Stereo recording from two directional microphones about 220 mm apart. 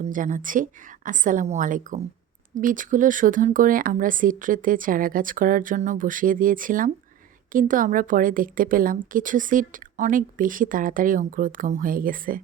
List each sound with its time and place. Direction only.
0.0 s a woman's voice: 35° right (ahead or behind)